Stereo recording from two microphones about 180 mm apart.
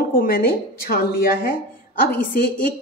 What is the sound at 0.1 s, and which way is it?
Speech, 50° left (ahead or behind).